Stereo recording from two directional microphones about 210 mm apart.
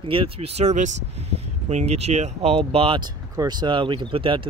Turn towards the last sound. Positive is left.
turn(degrees=-25)  # may be behind; listen again after turning